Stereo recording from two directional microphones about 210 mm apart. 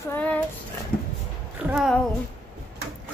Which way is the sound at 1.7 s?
Centre (ahead or behind).